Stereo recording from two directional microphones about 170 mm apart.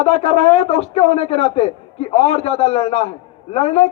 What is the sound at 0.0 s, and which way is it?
A man's voice, 35° left (ahead or behind).